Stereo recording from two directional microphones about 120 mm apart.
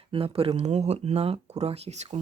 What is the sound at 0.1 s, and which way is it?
Speech, 50° right (ahead or behind).